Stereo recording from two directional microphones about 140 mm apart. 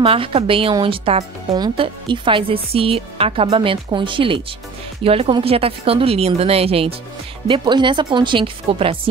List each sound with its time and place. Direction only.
0.0 s a woman's voice: 40° right (ahead or behind)